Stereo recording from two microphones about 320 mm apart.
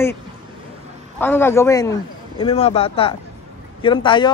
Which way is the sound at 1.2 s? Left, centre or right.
Centre.